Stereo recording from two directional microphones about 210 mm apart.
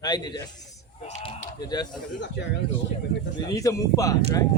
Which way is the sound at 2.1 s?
60° left (ahead or behind).